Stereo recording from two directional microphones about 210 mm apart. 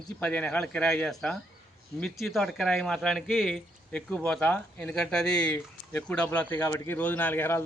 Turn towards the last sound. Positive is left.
turn(degrees=10)  # may be behind; listen again after turning